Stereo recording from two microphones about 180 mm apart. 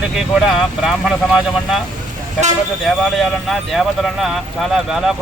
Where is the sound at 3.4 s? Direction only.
Centre (ahead or behind).